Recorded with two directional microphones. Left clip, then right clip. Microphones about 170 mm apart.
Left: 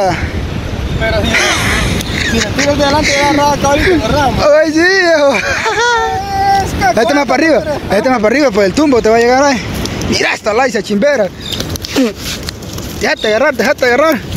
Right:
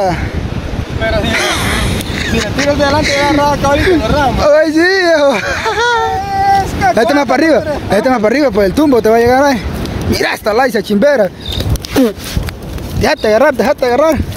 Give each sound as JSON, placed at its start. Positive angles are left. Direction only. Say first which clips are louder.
{"t": 1.0, "sound": "speech", "louder": "even", "side_deg": 0}
{"t": 1.3, "sound": "quack", "louder": "left 2 dB", "side_deg": -15}
{"t": 2.7, "sound": "speech", "louder": "even", "side_deg": 0}
{"t": 3.0, "sound": "speech", "louder": "left 1 dB", "side_deg": -25}
{"t": 3.3, "sound": "speech", "louder": "even", "side_deg": -5}
{"t": 4.4, "sound": "speech", "louder": "even", "side_deg": -15}
{"t": 6.3, "sound": "a sound", "louder": "right 1 dB", "side_deg": 0}
{"t": 7.0, "sound": "speech", "louder": "right 1 dB", "side_deg": -25}
{"t": 13.0, "sound": "speech", "louder": "right 2 dB", "side_deg": -30}
{"t": 13.6, "sound": "speech", "louder": "left 1 dB", "side_deg": -10}